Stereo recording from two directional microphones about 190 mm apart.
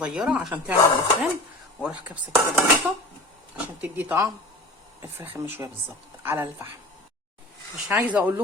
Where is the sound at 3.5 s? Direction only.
10° right (ahead or behind).